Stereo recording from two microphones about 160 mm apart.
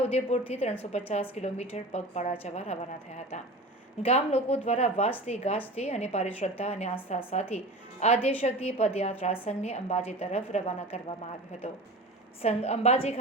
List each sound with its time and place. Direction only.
0.1 s a woman's voice: 40° left (ahead or behind)
12.4 s speech: 40° left (ahead or behind)